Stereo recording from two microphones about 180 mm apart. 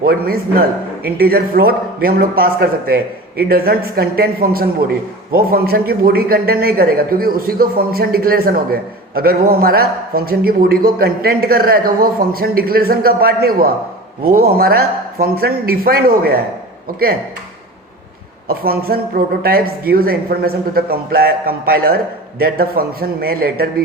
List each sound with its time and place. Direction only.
0.0 s a man's voice: 55° right (ahead or behind)
18.4 s a man's voice: 55° right (ahead or behind)